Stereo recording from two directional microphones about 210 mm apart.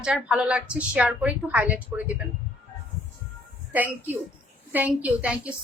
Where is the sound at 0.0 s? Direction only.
5° right (ahead or behind).